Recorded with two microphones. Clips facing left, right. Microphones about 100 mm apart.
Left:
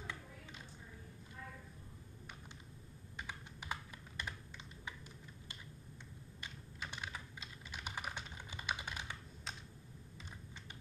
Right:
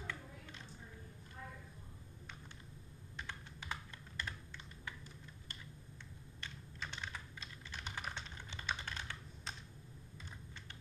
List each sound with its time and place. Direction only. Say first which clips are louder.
0.0 s a sound: right 1 dB; 15° left (ahead or behind)
3.2 s computer keyboard: even; 10° left (ahead or behind)
4.8 s typing: even; 15° left (ahead or behind)